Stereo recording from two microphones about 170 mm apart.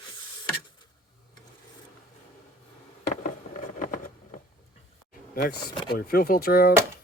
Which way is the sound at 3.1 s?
50° left (ahead or behind).